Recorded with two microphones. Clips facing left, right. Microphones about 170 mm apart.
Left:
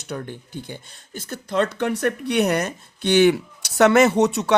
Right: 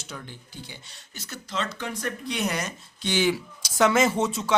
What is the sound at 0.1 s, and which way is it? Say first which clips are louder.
Speech: left 11 dB; 55° left (ahead or behind).